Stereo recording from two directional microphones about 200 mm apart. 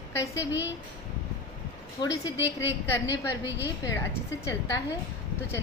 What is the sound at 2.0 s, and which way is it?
A woman's voice, 25° left (ahead or behind).